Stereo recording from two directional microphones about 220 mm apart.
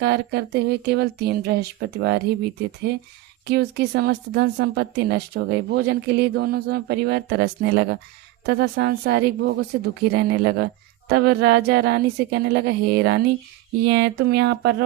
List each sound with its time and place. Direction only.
0.0 s speech: 50° right (ahead or behind)